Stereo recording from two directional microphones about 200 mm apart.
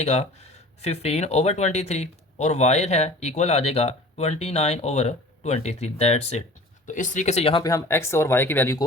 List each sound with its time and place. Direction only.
0.0 s speech: 35° left (ahead or behind)
7.6 s speech: 15° left (ahead or behind)